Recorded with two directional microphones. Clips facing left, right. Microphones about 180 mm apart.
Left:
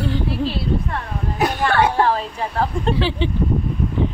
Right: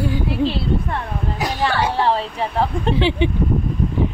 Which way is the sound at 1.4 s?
55° left (ahead or behind).